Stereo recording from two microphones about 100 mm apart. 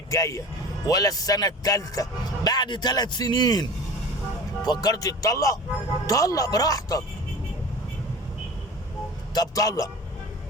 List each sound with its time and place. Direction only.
0.1 s a man's voice: 35° left (ahead or behind)
9.3 s a man's voice: 40° left (ahead or behind)